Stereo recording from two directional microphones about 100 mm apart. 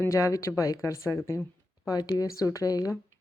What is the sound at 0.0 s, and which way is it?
Speech, 30° left (ahead or behind).